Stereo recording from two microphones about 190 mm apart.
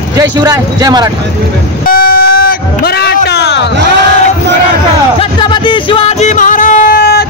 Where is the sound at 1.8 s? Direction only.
50° left (ahead or behind).